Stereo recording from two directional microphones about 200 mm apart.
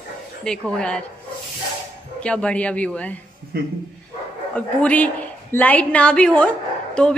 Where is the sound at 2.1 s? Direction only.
5° left (ahead or behind).